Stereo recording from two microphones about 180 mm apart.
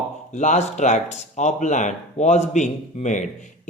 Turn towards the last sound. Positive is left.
turn(degrees=40)  # may be behind; listen again after turning